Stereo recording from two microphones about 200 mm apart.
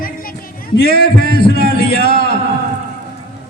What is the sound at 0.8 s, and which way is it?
Speech, 50° left (ahead or behind).